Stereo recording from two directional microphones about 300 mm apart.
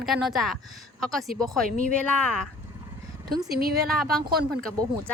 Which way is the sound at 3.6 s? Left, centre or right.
Right.